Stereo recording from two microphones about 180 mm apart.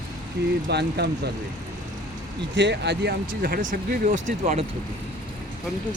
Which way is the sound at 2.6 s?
70° right (ahead or behind).